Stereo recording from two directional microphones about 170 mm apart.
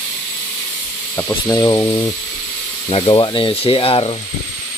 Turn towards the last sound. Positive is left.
turn(degrees=30)  # may be behind; listen again after turning